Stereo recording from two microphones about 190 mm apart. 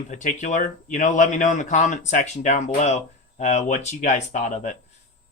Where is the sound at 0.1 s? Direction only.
40° left (ahead or behind).